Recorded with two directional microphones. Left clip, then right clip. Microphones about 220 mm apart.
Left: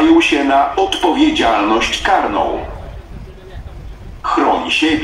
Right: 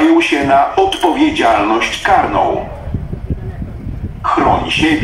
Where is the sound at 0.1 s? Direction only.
15° left (ahead or behind).